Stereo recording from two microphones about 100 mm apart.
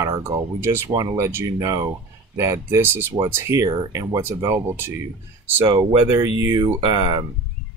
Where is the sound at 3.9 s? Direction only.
30° right (ahead or behind).